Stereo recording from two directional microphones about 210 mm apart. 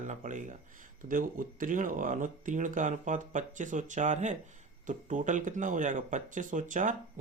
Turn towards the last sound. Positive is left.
turn(degrees=-35)  # may be behind; listen again after turning